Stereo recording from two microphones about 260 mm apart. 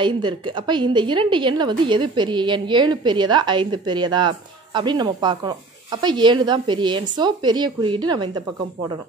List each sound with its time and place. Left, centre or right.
0.0 s a woman's voice: centre